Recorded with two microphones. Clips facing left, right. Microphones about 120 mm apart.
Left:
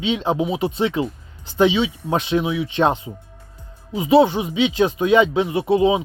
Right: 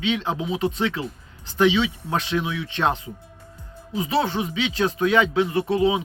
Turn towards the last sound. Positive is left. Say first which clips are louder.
# left 4 dB
turn(degrees=20)  # may be behind; listen again after turning